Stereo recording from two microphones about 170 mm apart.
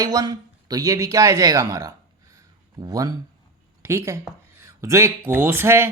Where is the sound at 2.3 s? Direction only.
20° right (ahead or behind).